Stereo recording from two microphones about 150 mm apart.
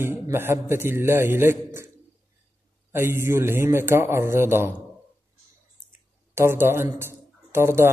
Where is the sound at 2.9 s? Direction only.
15° right (ahead or behind).